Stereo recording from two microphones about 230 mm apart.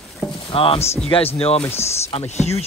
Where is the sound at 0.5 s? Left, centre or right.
Left.